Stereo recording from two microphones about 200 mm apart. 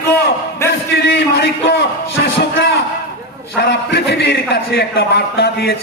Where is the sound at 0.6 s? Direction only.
15° left (ahead or behind).